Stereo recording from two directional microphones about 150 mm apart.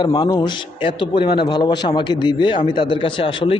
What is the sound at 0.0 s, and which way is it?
A man's voice, 25° left (ahead or behind).